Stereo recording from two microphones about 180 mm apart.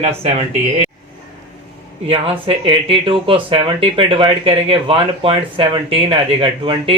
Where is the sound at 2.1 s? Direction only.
30° right (ahead or behind).